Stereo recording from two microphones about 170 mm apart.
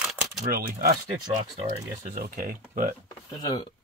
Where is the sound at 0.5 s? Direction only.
60° right (ahead or behind).